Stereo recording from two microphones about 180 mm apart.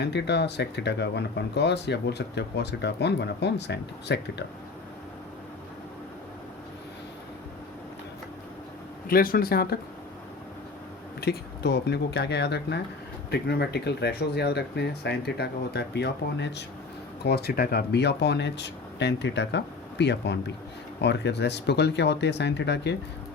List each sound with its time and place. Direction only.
0.0 s speech: 70° left (ahead or behind)
9.0 s speech: 55° left (ahead or behind)
11.2 s speech: 65° left (ahead or behind)
17.2 s speech: 60° left (ahead or behind)